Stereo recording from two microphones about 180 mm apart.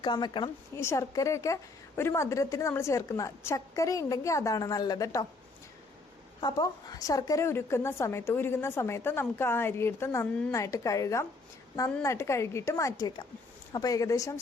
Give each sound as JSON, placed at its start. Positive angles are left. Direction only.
{"t": 0.0, "sound": "speech", "side_deg": 25}
{"t": 0.8, "sound": "a woman's voice", "side_deg": 15}
{"t": 6.4, "sound": "a woman's voice", "side_deg": 20}